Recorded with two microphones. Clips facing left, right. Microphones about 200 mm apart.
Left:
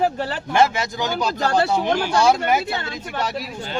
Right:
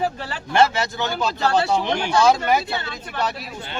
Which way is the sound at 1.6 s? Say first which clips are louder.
Left 2 dB; 50° left (ahead or behind).